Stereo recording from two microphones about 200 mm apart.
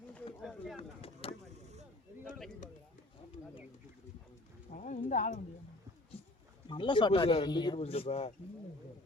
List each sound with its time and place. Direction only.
0.4 s bird: centre (ahead or behind)
0.8 s a sound: 30° left (ahead or behind)
4.7 s clip-clop: 40° left (ahead or behind)
6.7 s speech: 25° left (ahead or behind)